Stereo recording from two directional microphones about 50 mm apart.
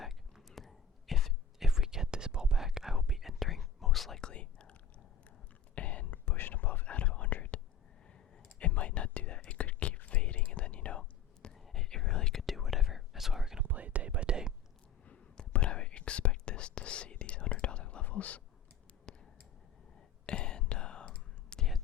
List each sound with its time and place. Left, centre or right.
0.0 s whispering: centre
4.2 s whispering: centre
6.2 s whispering: left
8.0 s clicking: centre
8.5 s whispering: left
11.4 s whispering: centre
12.4 s whispering: centre
13.7 s whispering: right
15.0 s whispering: left
19.1 s a sound: centre
20.2 s whispering: centre